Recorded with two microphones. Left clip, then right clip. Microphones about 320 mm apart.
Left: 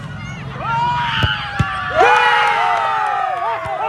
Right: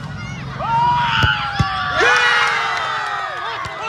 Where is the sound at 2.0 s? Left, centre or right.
Centre.